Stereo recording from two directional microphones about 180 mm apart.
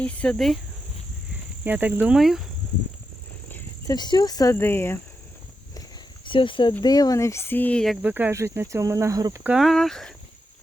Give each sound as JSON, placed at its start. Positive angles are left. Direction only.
{"t": 0.0, "sound": "speech", "side_deg": 5}
{"t": 1.6, "sound": "speech", "side_deg": -10}
{"t": 3.5, "sound": "speech", "side_deg": 20}
{"t": 6.2, "sound": "speech", "side_deg": 30}
{"t": 8.0, "sound": "speech", "side_deg": -10}
{"t": 9.4, "sound": "speech", "side_deg": -5}